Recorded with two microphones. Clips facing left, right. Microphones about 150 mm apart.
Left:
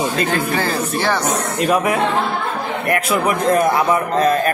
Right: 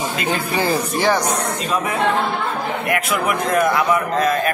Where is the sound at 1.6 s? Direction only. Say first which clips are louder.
Left 6 dB; 75° left (ahead or behind).